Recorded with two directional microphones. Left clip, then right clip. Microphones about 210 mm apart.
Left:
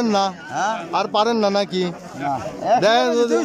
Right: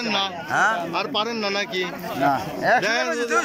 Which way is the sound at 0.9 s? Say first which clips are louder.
Left 6 dB; 20° left (ahead or behind).